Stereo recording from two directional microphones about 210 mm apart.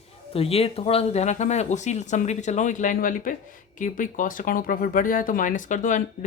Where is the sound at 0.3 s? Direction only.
30° left (ahead or behind).